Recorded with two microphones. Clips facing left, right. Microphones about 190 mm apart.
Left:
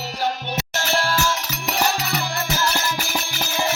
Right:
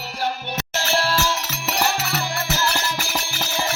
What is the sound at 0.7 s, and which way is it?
Music, 30° right (ahead or behind).